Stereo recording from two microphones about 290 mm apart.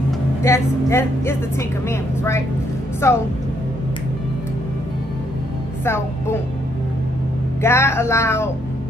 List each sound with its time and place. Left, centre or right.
0.4 s speech: centre
7.6 s speech: centre